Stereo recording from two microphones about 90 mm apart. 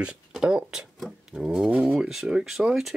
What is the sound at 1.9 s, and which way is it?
Speech, centre (ahead or behind).